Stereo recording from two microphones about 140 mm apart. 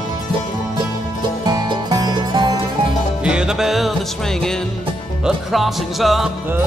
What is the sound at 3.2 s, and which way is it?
Music, 5° right (ahead or behind).